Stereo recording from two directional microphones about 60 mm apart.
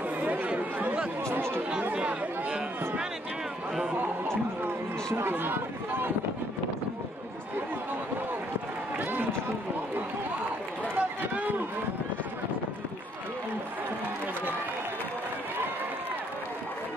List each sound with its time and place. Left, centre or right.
0.2 s chatter: right
1.3 s chatter: right
2.0 s chatter: centre
3.9 s chatter: right
11.0 s run: right